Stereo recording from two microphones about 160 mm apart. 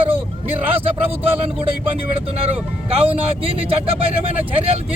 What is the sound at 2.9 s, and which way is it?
Speech, 35° right (ahead or behind).